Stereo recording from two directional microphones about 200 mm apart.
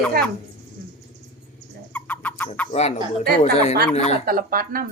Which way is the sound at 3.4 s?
35° left (ahead or behind).